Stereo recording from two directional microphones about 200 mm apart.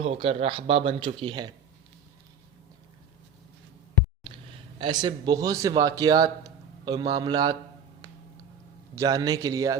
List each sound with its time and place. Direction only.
0.0 s a man's voice: 30° right (ahead or behind)
4.8 s a man's voice: 20° right (ahead or behind)
9.0 s a man's voice: 20° right (ahead or behind)